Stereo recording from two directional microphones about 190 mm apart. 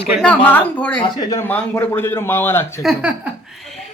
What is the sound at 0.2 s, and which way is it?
Speech, 5° left (ahead or behind).